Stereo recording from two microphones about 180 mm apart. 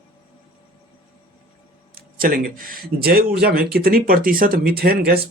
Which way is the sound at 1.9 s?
55° right (ahead or behind).